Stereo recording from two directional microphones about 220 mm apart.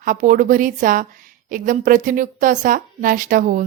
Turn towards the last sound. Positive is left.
turn(degrees=-40)  # may be behind; listen again after turning